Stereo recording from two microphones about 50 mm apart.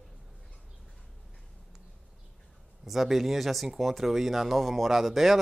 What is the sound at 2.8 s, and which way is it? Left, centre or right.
Speech, centre.